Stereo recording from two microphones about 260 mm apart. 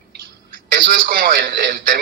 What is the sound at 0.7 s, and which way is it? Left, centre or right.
A man's voice, right.